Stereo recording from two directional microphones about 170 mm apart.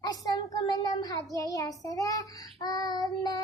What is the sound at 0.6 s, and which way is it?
A child's voice, 25° left (ahead or behind).